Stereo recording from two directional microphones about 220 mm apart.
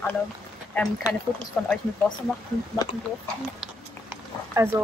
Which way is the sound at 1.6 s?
5° left (ahead or behind).